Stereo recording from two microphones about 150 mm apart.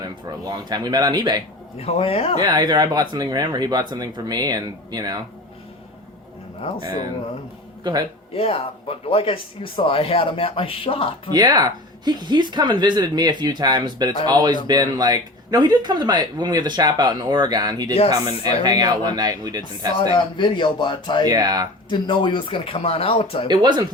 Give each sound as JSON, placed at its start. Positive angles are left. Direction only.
{"t": 0.0, "sound": "speech", "side_deg": -25}
{"t": 1.7, "sound": "speech", "side_deg": 40}
{"t": 2.4, "sound": "speech", "side_deg": -30}
{"t": 8.3, "sound": "speech", "side_deg": 40}
{"t": 11.3, "sound": "speech", "side_deg": -25}
{"t": 20.1, "sound": "speech", "side_deg": 30}
{"t": 21.2, "sound": "speech", "side_deg": -25}
{"t": 21.8, "sound": "speech", "side_deg": 35}
{"t": 23.5, "sound": "speech", "side_deg": -30}